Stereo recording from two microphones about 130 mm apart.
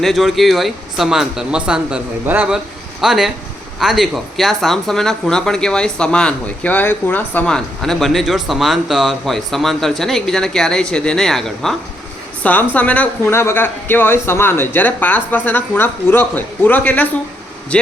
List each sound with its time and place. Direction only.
0.0 s a woman's voice: centre (ahead or behind)